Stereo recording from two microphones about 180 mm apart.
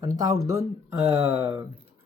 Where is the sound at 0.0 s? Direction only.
20° right (ahead or behind).